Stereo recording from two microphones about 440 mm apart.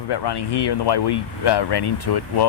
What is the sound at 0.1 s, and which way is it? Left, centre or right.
Speech, left.